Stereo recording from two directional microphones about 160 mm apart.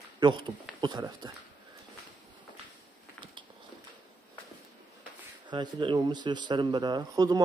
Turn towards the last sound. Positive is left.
turn(degrees=-25)  # may be behind; listen again after turning